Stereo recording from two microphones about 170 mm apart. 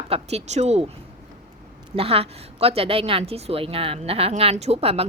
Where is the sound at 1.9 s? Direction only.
35° right (ahead or behind).